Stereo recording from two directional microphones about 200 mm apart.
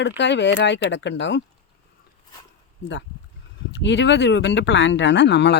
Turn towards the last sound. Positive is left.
turn(degrees=60)  # may be behind; listen again after turning